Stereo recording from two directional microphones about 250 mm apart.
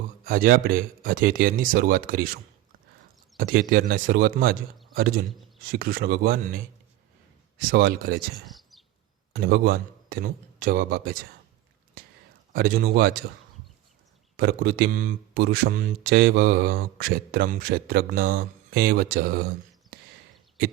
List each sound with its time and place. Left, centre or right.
0.3 s speech: right
7.6 s speech: right
8.4 s a sound: centre
9.3 s a man's voice: right
12.5 s speech: right
14.3 s speech: right